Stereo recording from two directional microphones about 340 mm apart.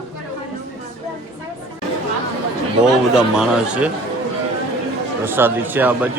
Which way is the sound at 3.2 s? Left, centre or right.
Centre.